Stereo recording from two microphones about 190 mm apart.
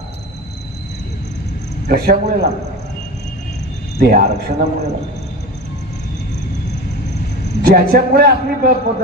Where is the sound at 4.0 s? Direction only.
50° right (ahead or behind).